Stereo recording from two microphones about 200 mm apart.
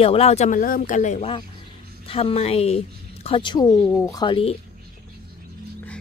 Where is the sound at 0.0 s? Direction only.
30° left (ahead or behind).